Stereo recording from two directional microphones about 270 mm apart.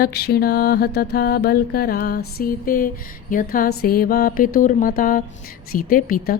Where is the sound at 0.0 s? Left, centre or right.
Left.